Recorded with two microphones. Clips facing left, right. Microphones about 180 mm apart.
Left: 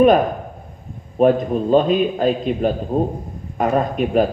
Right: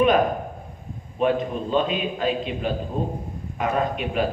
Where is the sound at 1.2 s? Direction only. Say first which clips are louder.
Left 7 dB; 45° left (ahead or behind).